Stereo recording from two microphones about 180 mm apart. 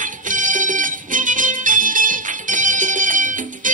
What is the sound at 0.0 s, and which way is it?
Music, 45° right (ahead or behind).